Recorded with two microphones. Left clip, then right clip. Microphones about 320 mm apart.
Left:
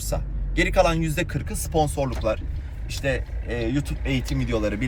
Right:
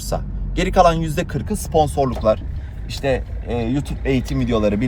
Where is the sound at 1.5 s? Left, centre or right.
Centre.